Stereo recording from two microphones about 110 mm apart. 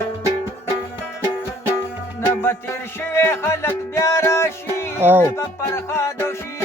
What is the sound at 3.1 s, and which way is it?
Music, 20° left (ahead or behind).